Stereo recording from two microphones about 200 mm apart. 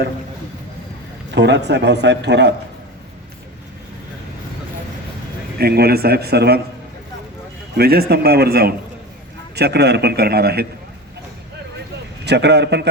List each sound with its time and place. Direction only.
1.4 s speech: 60° right (ahead or behind)
5.5 s a man's voice: 50° right (ahead or behind)
7.8 s a man's voice: 50° right (ahead or behind)
12.2 s speech: 55° right (ahead or behind)